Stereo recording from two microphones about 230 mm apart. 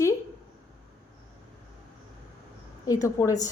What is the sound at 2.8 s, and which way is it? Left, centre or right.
Speech, centre.